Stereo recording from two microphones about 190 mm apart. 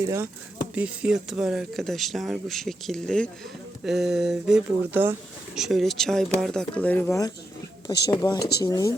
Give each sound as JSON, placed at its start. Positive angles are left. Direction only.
{"t": 0.0, "sound": "speech", "side_deg": -15}
{"t": 7.9, "sound": "speech", "side_deg": 20}
{"t": 8.4, "sound": "speech", "side_deg": 55}
{"t": 8.6, "sound": "speech", "side_deg": 20}